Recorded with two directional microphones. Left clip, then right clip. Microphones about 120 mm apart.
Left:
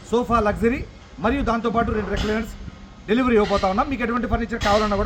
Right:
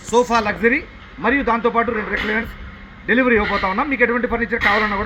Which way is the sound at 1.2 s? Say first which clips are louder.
Right 5 dB; 60° left (ahead or behind).